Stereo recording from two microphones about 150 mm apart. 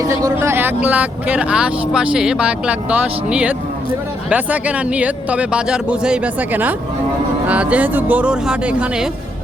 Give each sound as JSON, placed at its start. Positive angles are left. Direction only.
{"t": 0.0, "sound": "speech", "side_deg": -25}